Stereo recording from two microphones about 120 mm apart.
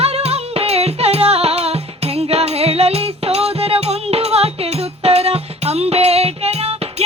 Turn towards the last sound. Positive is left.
turn(degrees=-60)  # may be behind; listen again after turning